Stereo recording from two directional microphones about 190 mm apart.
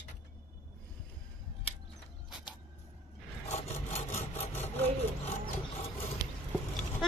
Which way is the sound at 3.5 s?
35° left (ahead or behind).